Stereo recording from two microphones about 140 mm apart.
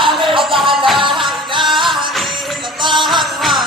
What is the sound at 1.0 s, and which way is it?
Music, 35° right (ahead or behind).